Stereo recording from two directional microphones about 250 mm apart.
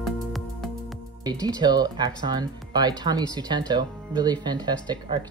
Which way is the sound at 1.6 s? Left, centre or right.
Centre.